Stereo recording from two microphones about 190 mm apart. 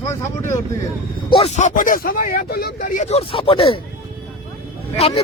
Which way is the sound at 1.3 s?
35° left (ahead or behind).